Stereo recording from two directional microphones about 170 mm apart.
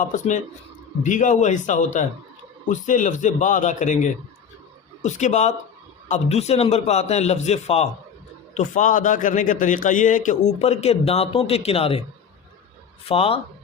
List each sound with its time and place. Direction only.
0.0 s a man's voice: 45° left (ahead or behind)
13.1 s a man's voice: 35° left (ahead or behind)